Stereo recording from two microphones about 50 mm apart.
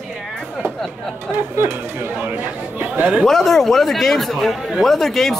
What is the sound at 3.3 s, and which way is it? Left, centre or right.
Speech, centre.